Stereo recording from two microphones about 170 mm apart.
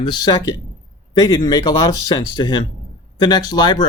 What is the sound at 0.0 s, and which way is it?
Speech, 25° left (ahead or behind).